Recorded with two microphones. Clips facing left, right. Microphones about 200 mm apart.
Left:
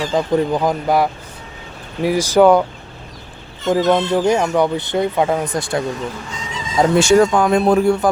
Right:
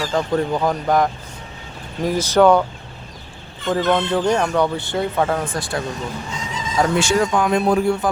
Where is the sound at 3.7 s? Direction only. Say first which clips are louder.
Left 3 dB; 15° left (ahead or behind).